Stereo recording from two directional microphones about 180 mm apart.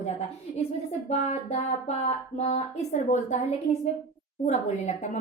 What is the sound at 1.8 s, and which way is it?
Speech, 35° left (ahead or behind).